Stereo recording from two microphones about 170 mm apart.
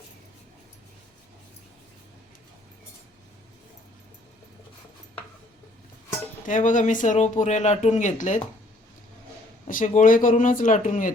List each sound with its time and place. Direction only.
6.4 s speech: 50° left (ahead or behind)
9.6 s speech: 50° left (ahead or behind)